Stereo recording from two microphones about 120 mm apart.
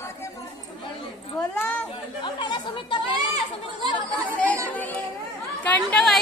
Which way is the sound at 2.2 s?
40° left (ahead or behind).